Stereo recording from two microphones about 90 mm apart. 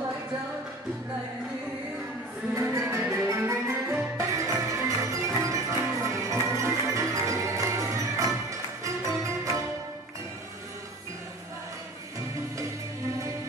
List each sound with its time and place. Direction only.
2.5 s music: 35° right (ahead or behind)